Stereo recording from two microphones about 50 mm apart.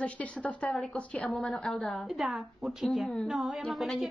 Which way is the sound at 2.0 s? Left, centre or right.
Centre.